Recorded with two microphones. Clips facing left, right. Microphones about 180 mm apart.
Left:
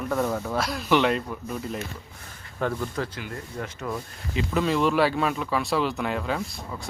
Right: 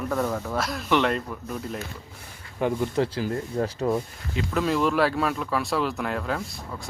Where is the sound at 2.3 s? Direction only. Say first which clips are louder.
Right 2 dB; 15° right (ahead or behind).